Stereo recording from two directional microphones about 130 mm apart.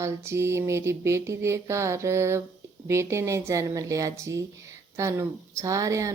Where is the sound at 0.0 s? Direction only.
20° right (ahead or behind).